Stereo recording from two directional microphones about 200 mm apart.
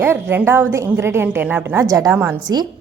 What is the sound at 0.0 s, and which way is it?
A woman's voice, 10° right (ahead or behind).